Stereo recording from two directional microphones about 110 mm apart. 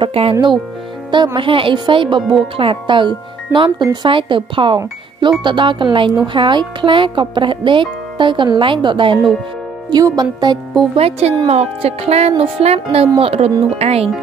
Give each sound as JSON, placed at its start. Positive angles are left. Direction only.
{"t": 0.0, "sound": "music", "side_deg": -55}
{"t": 1.1, "sound": "speech", "side_deg": -45}
{"t": 9.8, "sound": "speech", "side_deg": -35}
{"t": 11.0, "sound": "music", "side_deg": -65}
{"t": 13.2, "sound": "speech", "side_deg": -65}